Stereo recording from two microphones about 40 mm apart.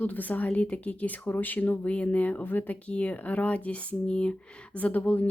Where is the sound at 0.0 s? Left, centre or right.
Left.